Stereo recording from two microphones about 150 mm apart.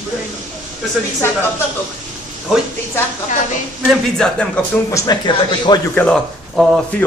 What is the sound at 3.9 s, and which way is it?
Speech, 5° left (ahead or behind).